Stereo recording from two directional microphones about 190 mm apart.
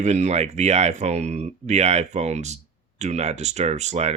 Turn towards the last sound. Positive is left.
turn(degrees=-35)  # may be behind; listen again after turning